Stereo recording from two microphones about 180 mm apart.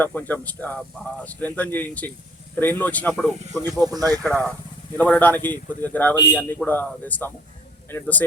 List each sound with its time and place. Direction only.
0.0 s speech: 10° left (ahead or behind)
3.7 s speech: 20° right (ahead or behind)
4.2 s speech: 5° left (ahead or behind)